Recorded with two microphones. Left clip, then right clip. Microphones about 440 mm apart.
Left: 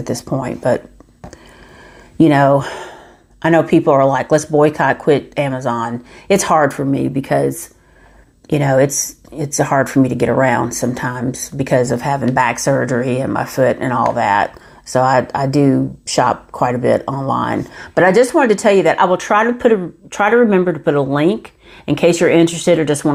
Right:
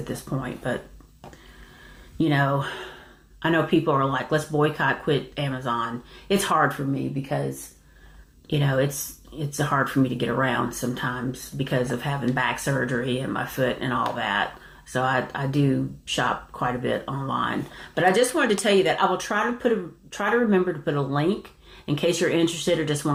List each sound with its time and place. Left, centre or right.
0.1 s speech: left
2.2 s speech: left
8.4 s speech: left